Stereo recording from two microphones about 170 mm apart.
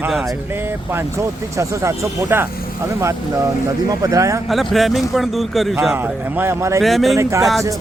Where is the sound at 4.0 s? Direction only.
20° right (ahead or behind).